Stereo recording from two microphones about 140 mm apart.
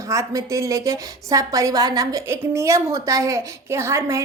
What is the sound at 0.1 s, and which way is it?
A woman's voice, 20° right (ahead or behind).